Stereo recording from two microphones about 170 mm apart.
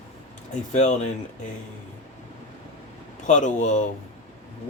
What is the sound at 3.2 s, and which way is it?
Speech, 45° left (ahead or behind).